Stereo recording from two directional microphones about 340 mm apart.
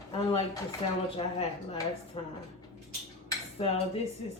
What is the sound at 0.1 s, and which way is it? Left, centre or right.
Speech, centre.